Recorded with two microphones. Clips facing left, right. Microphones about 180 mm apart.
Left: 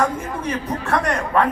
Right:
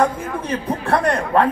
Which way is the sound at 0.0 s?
30° right (ahead or behind).